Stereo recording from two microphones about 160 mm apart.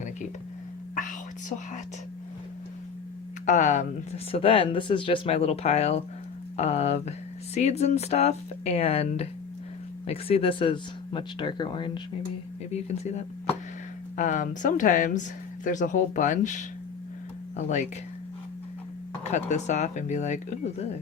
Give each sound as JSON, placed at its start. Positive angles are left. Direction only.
{"t": 0.9, "sound": "whispering", "side_deg": 55}
{"t": 3.4, "sound": "speech", "side_deg": 50}
{"t": 4.3, "sound": "speech", "side_deg": 35}
{"t": 12.7, "sound": "speech", "side_deg": 45}
{"t": 19.3, "sound": "speech", "side_deg": 45}